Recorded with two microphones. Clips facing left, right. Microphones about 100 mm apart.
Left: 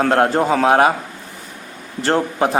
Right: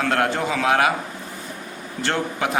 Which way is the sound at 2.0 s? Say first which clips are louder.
Left 6 dB; 35° left (ahead or behind).